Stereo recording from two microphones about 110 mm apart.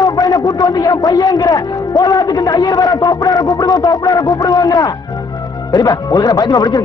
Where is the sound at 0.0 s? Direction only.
35° left (ahead or behind).